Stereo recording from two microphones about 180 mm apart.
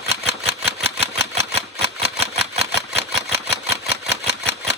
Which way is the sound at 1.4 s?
35° right (ahead or behind).